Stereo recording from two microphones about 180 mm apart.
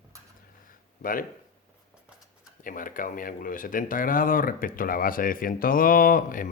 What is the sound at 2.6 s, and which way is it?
Speech, 50° left (ahead or behind).